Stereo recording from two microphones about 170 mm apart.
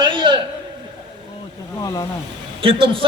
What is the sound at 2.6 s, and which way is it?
Speech, 30° right (ahead or behind).